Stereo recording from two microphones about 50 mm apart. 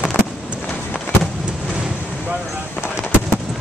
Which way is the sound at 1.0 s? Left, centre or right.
Centre.